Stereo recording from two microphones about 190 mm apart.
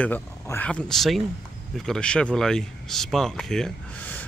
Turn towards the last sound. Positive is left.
turn(degrees=5)  # may be behind; listen again after turning